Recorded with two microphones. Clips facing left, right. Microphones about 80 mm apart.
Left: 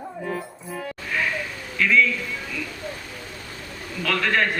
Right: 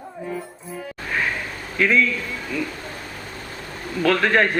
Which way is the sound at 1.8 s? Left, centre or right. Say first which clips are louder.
Right 3 dB; right.